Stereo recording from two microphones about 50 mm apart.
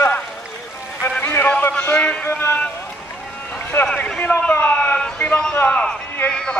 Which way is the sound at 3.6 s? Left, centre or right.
Left.